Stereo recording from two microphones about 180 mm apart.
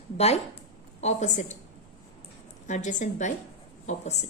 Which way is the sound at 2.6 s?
40° left (ahead or behind).